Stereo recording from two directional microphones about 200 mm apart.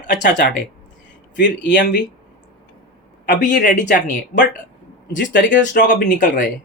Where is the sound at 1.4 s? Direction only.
60° left (ahead or behind).